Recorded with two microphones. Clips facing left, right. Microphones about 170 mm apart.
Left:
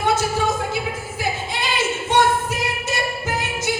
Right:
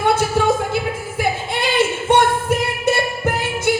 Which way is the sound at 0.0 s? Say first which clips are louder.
Right 3 dB; 60° right (ahead or behind).